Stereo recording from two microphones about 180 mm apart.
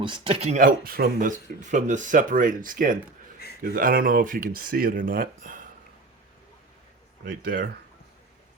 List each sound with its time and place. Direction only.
0.0 s speech: 25° right (ahead or behind); by 5.6 s 50° right (ahead or behind)